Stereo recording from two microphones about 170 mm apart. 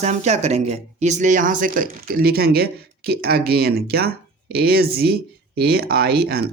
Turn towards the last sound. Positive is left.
turn(degrees=-65)  # may be behind; listen again after turning